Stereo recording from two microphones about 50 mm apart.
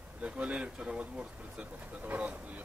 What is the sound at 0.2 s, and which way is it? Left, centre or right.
Speech, right.